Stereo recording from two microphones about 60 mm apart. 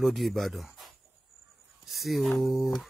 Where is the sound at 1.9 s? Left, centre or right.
Centre.